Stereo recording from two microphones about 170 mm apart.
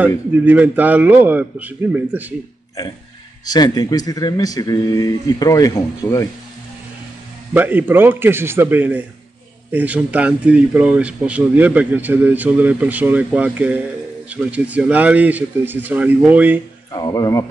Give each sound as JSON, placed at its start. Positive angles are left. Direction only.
{"t": 0.0, "sound": "speech", "side_deg": -10}
{"t": 3.4, "sound": "speech", "side_deg": 25}
{"t": 7.5, "sound": "speech", "side_deg": -10}
{"t": 16.9, "sound": "speech", "side_deg": 20}